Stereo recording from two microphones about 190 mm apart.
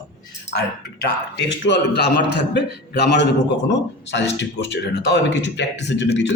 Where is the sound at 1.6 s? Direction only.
65° left (ahead or behind).